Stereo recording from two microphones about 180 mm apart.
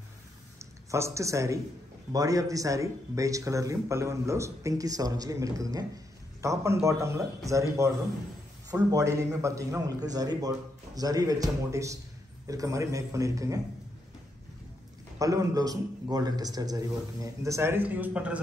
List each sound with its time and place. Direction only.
0.6 s a man's voice: 15° right (ahead or behind)
15.1 s speech: 20° right (ahead or behind)